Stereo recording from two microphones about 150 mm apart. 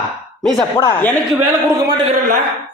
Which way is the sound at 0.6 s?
25° left (ahead or behind).